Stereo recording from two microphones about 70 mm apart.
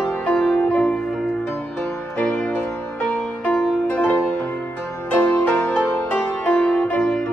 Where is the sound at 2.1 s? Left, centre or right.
Centre.